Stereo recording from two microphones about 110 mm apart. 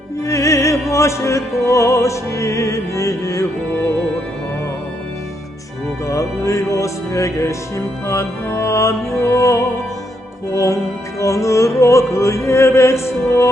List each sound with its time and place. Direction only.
0.3 s music: 25° left (ahead or behind)
6.1 s music: 30° left (ahead or behind)